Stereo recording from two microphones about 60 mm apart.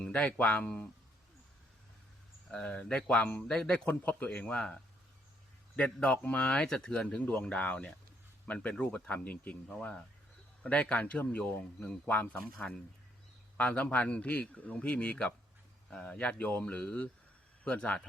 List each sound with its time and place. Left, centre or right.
0.0 s a man's voice: centre
2.5 s speech: centre
3.8 s a man's voice: left
4.3 s a man's voice: centre
8.4 s a man's voice: left
10.6 s a man's voice: left
12.6 s a man's voice: centre